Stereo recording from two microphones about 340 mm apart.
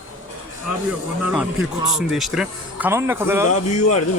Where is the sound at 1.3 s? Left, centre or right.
Centre.